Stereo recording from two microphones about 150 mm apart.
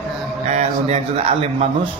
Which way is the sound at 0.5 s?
45° right (ahead or behind).